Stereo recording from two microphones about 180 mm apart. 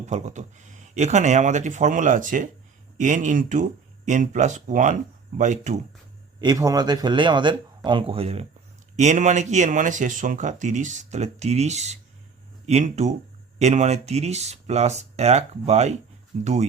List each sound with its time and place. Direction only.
0.0 s speech: 40° right (ahead or behind)
6.4 s speech: 20° right (ahead or behind); by 16.6 s 40° right (ahead or behind)